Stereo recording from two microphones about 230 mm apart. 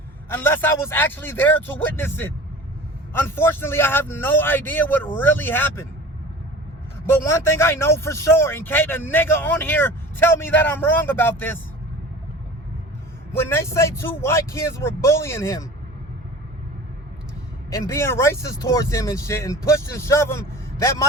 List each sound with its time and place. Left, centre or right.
0.3 s a man's voice: centre
7.0 s a man's voice: centre
13.3 s a man's voice: centre
17.7 s a man's voice: centre